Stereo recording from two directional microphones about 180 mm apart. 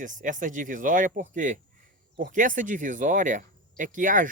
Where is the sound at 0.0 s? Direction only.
45° right (ahead or behind).